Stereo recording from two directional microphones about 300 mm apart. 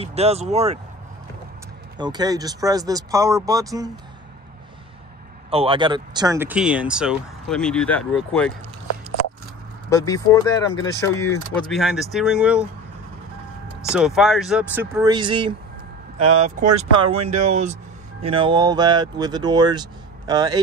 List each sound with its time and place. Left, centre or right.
0.0 s speech: right
2.0 s speech: centre
5.5 s speech: centre
9.8 s speech: centre
13.9 s speech: centre